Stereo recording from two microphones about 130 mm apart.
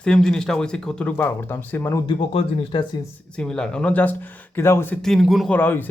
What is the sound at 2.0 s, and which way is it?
Speech, 40° left (ahead or behind).